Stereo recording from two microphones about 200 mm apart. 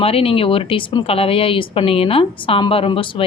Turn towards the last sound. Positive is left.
turn(degrees=25)  # may be behind; listen again after turning